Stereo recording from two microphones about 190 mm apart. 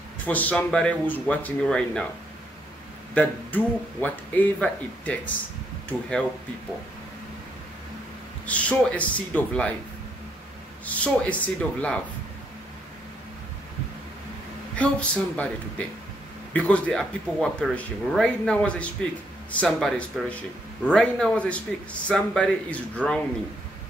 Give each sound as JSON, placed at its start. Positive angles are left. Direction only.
{"t": 0.2, "sound": "speech", "side_deg": 10}
{"t": 3.2, "sound": "speech", "side_deg": 10}
{"t": 8.5, "sound": "speech", "side_deg": 5}
{"t": 10.9, "sound": "speech", "side_deg": 5}
{"t": 14.8, "sound": "speech", "side_deg": 5}
{"t": 16.5, "sound": "speech", "side_deg": 5}